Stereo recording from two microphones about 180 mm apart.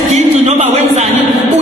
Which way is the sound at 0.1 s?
40° right (ahead or behind).